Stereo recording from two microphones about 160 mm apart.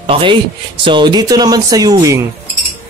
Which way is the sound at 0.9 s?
30° right (ahead or behind).